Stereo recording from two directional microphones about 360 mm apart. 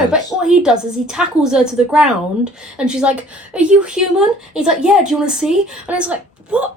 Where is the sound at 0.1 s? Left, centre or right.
Centre.